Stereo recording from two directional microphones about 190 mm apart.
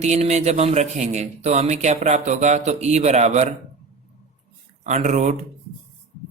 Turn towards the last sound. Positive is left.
turn(degrees=-40)  # may be behind; listen again after turning